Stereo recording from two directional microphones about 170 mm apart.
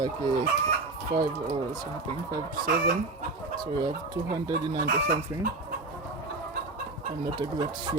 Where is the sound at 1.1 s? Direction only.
60° right (ahead or behind).